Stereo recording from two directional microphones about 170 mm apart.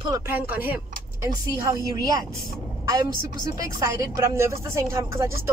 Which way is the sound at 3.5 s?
20° right (ahead or behind).